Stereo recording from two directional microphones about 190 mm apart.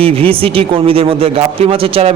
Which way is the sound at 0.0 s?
30° right (ahead or behind).